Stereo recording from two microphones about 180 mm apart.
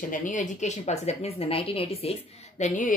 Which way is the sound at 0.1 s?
45° left (ahead or behind).